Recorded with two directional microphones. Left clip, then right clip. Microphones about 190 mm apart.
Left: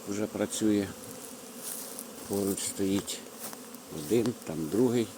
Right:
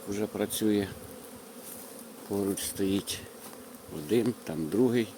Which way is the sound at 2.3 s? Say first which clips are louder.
Even; 15° right (ahead or behind).